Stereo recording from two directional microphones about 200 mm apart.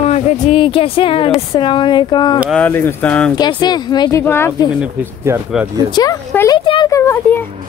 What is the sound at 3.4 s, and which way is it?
Speech, 20° left (ahead or behind).